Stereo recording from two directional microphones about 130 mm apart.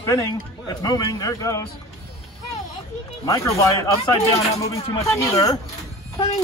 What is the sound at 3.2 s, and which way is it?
Speech, 25° left (ahead or behind).